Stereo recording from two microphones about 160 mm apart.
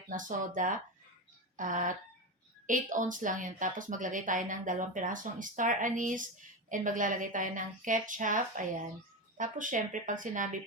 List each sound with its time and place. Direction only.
0.1 s a woman's voice: 55° right (ahead or behind)